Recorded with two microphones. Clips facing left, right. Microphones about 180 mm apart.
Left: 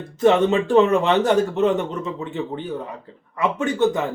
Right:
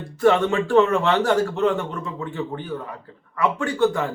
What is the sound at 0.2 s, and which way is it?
Speech, 20° left (ahead or behind).